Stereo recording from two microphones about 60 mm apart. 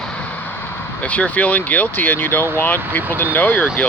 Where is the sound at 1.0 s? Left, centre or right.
Left.